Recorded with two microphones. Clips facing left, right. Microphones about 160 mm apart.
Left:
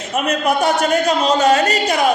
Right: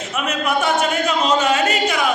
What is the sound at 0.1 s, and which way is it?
A man's voice, 40° left (ahead or behind).